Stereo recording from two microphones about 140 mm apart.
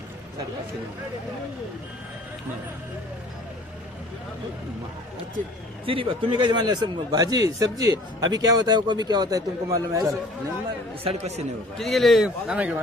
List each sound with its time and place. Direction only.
5.8 s a man's voice: 40° right (ahead or behind); by 10.2 s 25° right (ahead or behind)
11.0 s speech: 50° right (ahead or behind)
11.8 s a man's voice: centre (ahead or behind)